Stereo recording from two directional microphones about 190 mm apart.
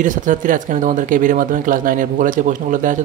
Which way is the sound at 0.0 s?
45° right (ahead or behind).